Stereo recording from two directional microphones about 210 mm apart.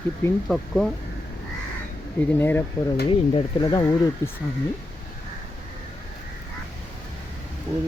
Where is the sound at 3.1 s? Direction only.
25° left (ahead or behind).